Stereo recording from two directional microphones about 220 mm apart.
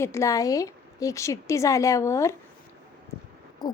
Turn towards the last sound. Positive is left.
turn(degrees=20)  # may be behind; listen again after turning